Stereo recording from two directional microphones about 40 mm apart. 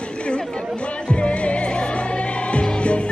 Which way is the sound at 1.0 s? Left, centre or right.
Left.